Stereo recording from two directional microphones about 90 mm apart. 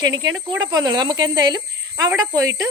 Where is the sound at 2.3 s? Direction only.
40° right (ahead or behind).